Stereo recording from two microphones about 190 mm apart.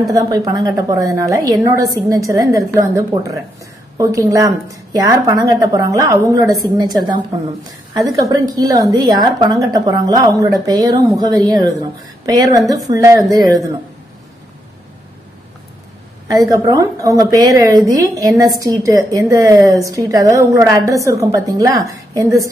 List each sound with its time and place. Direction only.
0.0 s a woman's voice: 20° right (ahead or behind)
16.3 s a woman's voice: 20° right (ahead or behind)